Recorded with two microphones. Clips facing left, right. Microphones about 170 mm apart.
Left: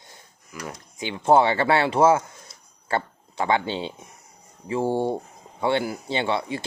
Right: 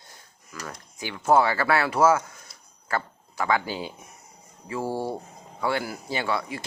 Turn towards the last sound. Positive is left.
turn(degrees=25)  # may be behind; listen again after turning